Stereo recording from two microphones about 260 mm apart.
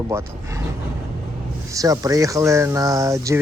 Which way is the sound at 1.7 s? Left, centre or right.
Centre.